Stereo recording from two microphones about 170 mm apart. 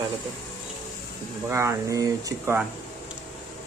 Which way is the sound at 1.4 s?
15° right (ahead or behind).